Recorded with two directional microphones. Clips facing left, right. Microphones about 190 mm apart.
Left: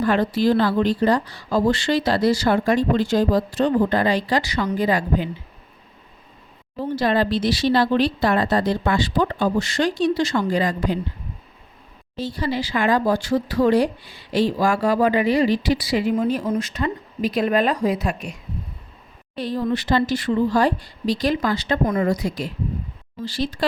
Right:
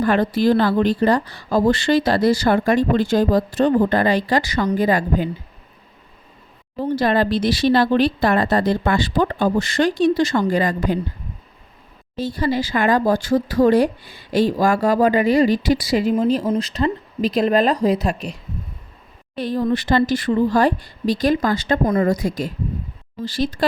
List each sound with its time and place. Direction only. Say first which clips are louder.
0.0 s a woman's voice: right 2 dB; 50° right (ahead or behind)
7.0 s a woman's voice: right 1 dB; 50° right (ahead or behind)
12.1 s a woman's voice: right 4 dB; 50° right (ahead or behind)
19.4 s a woman's voice: right 3 dB; 50° right (ahead or behind)